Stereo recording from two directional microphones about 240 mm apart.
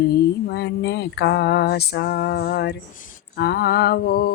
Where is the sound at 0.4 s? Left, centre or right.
Left.